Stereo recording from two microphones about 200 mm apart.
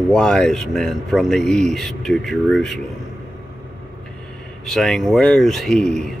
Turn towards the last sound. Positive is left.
turn(degrees=0)  # may be behind; listen again after turning